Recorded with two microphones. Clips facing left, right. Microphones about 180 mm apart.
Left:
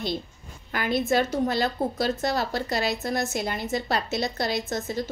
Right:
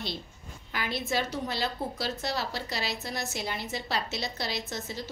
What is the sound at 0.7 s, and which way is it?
A woman's voice, 50° left (ahead or behind).